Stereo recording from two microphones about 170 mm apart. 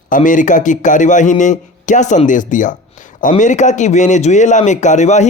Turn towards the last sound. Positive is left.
turn(degrees=40)  # may be behind; listen again after turning